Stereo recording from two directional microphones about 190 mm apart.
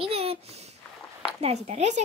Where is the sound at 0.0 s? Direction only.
30° right (ahead or behind).